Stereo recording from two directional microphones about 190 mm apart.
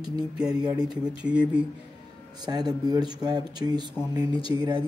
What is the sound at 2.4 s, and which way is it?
Speech, 20° right (ahead or behind).